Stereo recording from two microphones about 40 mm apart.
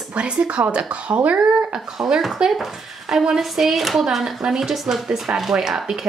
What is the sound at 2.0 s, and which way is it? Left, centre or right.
Speech, centre.